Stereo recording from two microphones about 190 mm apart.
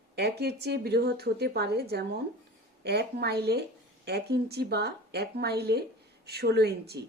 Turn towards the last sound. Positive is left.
turn(degrees=-60)  # may be behind; listen again after turning